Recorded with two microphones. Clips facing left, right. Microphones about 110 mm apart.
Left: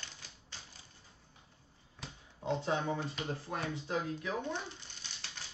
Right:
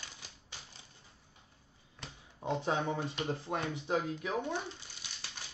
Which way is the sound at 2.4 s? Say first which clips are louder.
Right 1 dB; 15° right (ahead or behind).